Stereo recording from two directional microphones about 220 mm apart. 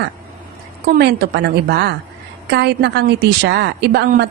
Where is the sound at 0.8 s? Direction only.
45° right (ahead or behind).